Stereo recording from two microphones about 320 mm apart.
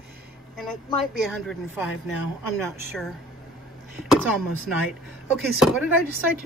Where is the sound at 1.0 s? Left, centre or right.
Centre.